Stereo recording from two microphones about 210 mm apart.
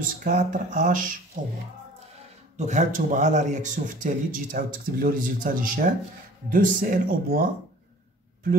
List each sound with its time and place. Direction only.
0.2 s a man's voice: 35° right (ahead or behind)
2.5 s a man's voice: 35° right (ahead or behind)